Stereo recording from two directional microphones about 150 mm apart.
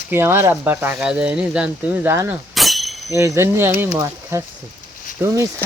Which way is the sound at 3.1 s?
20° right (ahead or behind).